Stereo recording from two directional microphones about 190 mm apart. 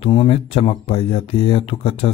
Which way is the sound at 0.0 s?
30° left (ahead or behind).